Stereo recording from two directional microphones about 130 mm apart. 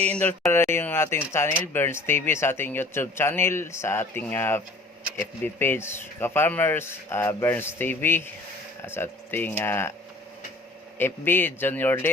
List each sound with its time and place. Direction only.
0.0 s speech: 10° left (ahead or behind)
10.9 s speech: 15° left (ahead or behind)